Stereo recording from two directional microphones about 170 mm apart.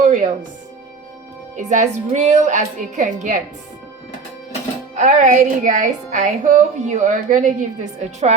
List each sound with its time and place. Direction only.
0.0 s music: 45° right (ahead or behind)
1.5 s a woman's voice: 45° right (ahead or behind)
4.9 s a woman's voice: 45° right (ahead or behind)